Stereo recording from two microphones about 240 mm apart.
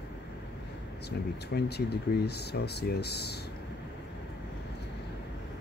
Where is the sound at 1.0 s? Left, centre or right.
Left.